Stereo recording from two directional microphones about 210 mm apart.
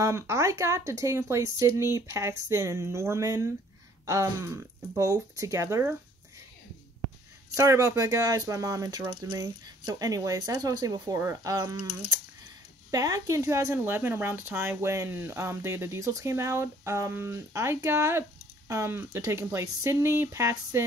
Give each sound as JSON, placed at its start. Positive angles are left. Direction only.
{"t": 0.0, "sound": "speech", "side_deg": -15}
{"t": 7.5, "sound": "speech", "side_deg": -15}
{"t": 12.9, "sound": "speech", "side_deg": -15}